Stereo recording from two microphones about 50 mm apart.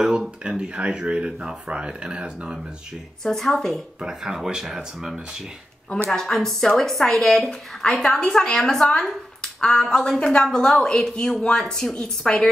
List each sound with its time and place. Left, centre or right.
0.0 s speech: centre
3.3 s speech: centre
4.1 s speech: centre
6.0 s a woman's voice: centre